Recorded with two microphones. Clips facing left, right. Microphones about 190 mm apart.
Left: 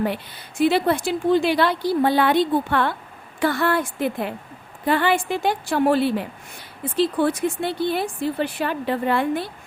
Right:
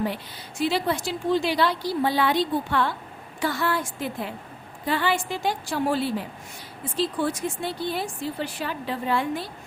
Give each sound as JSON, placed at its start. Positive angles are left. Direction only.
{"t": 0.6, "sound": "speech", "side_deg": 55}